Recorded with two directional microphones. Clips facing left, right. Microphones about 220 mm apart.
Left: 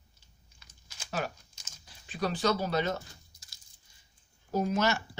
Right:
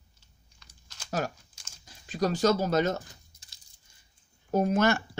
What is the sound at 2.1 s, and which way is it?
Speech, 40° right (ahead or behind).